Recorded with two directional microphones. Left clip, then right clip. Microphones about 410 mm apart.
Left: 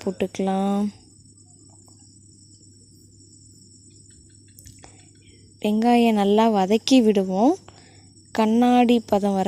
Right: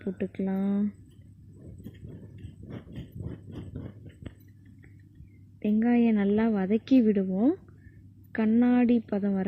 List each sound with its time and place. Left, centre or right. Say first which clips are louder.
0.0 s a woman's voice: left 9 dB; centre
5.5 s a woman's voice: left 7 dB; centre
8.3 s a woman's voice: left 7 dB; centre